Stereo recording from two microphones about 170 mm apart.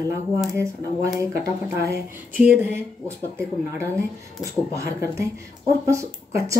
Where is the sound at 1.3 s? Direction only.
55° left (ahead or behind).